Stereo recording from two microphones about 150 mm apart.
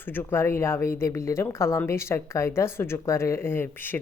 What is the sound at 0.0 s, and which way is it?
A woman's voice, 15° left (ahead or behind).